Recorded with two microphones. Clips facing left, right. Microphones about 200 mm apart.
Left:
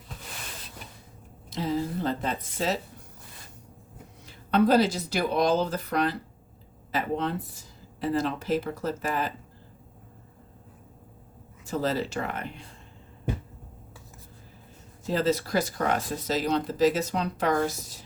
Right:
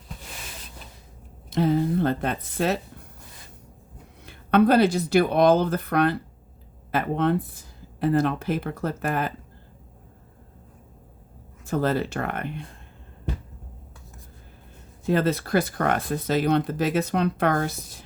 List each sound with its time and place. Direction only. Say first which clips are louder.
1.5 s speech: right 7 dB; 60° right (ahead or behind)
4.2 s speech: right 4 dB; 60° right (ahead or behind)
11.6 s speech: right 4 dB; 55° right (ahead or behind)
15.0 s speech: right 3 dB; 60° right (ahead or behind)